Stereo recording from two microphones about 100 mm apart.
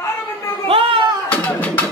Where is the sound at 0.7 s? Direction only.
65° right (ahead or behind).